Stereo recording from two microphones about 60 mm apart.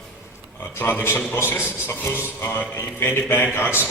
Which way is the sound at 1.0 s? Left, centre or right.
Left.